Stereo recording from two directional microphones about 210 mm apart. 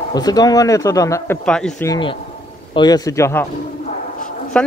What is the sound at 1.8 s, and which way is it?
A man's voice, 20° left (ahead or behind).